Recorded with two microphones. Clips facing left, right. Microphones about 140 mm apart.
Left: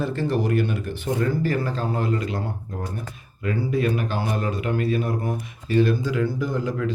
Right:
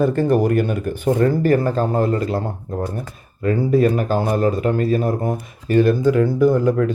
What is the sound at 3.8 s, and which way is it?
Speech, 40° right (ahead or behind).